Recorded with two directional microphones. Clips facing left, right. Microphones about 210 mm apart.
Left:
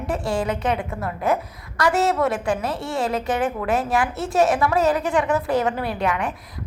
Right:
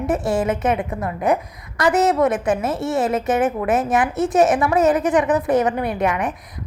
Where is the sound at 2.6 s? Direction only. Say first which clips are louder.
Right 4 dB; 20° right (ahead or behind).